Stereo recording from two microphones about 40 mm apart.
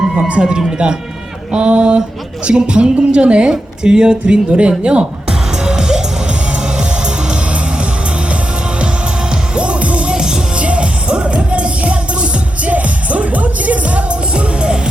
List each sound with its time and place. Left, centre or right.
0.3 s speech: right
5.6 s music: centre
9.6 s music: right
10.6 s music: right